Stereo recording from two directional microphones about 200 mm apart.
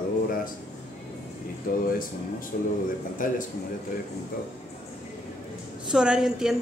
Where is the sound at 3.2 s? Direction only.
40° left (ahead or behind).